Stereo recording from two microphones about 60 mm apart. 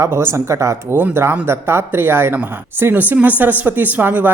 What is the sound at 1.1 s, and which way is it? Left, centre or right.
Speech, right.